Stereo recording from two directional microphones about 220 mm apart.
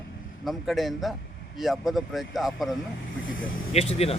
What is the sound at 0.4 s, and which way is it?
Speech, centre (ahead or behind).